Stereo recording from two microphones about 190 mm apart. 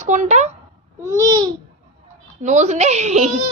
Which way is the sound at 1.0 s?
15° right (ahead or behind).